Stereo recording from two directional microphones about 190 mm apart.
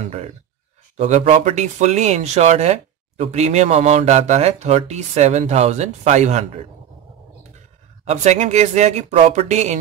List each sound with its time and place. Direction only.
0.9 s speech: 40° right (ahead or behind)
8.0 s speech: 35° right (ahead or behind)